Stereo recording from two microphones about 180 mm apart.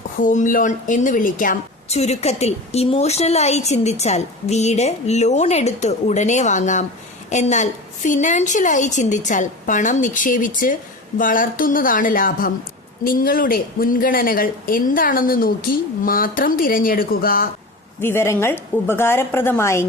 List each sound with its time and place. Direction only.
0.2 s a woman's voice: 45° left (ahead or behind)
18.0 s a woman's voice: 15° left (ahead or behind)